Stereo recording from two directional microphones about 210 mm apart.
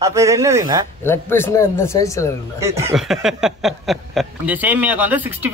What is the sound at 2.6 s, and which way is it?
Speech, 15° right (ahead or behind).